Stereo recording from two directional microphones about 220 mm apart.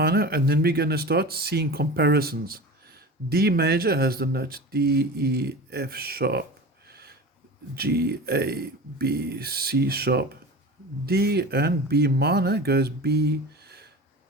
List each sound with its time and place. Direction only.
0.0 s speech: 45° right (ahead or behind)
6.8 s a sound: 45° right (ahead or behind)
7.8 s speech: 45° right (ahead or behind)